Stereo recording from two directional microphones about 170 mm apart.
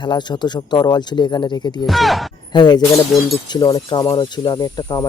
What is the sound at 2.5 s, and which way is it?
Speech, 25° left (ahead or behind).